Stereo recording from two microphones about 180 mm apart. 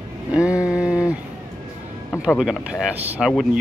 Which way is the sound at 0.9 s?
20° left (ahead or behind).